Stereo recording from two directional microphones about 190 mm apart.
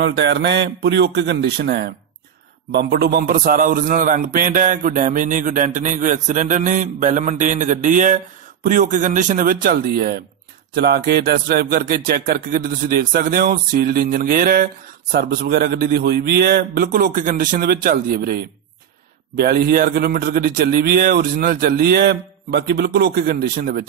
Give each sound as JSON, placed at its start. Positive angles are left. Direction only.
{"t": 0.0, "sound": "a man's voice", "side_deg": -60}